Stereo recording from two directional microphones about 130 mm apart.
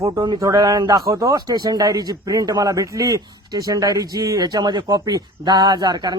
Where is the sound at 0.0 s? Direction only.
25° right (ahead or behind).